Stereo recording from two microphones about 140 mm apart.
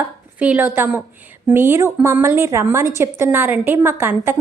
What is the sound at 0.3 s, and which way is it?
A woman's voice, 10° right (ahead or behind).